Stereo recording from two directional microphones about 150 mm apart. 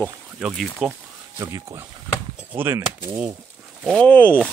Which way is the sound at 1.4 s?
20° right (ahead or behind).